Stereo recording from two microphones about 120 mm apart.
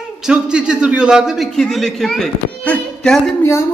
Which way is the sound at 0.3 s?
10° right (ahead or behind).